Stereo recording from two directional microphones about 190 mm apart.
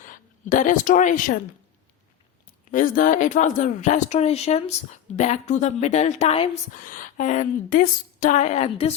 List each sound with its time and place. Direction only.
0.0 s speech: 45° left (ahead or behind)
2.6 s speech: 45° left (ahead or behind)
6.7 s speech: 45° left (ahead or behind)